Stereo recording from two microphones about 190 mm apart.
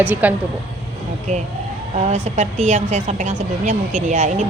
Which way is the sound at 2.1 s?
35° right (ahead or behind).